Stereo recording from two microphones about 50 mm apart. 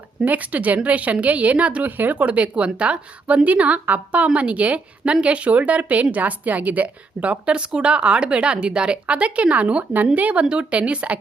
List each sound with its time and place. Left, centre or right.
0.3 s a woman's voice: right